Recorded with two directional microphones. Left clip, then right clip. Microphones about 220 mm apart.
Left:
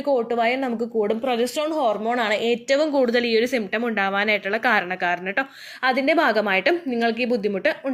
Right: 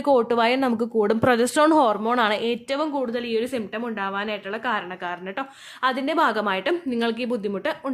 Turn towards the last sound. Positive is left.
turn(degrees=0)  # may be behind; listen again after turning